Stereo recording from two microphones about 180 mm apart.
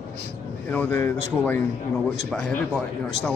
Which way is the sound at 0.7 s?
10° left (ahead or behind).